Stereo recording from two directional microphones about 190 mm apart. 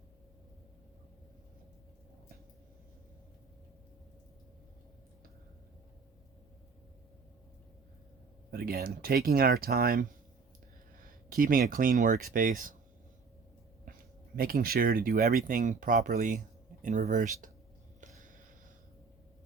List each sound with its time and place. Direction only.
8.4 s speech: 50° right (ahead or behind)
13.8 s speech: 50° right (ahead or behind)
18.0 s a sound: 40° right (ahead or behind)